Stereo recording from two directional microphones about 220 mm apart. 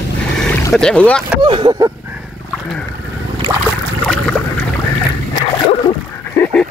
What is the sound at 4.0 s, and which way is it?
Boat, 5° left (ahead or behind).